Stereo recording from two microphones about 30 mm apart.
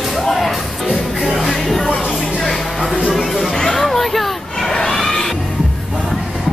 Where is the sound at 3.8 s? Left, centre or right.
Centre.